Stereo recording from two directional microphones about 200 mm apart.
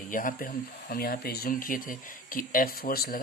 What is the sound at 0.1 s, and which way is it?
Speech, 40° left (ahead or behind).